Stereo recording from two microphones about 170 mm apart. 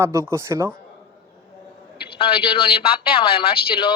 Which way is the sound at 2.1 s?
30° left (ahead or behind).